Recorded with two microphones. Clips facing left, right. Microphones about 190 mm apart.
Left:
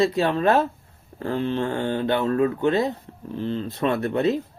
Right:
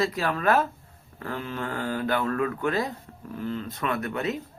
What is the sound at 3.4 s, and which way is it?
Speech, 30° left (ahead or behind).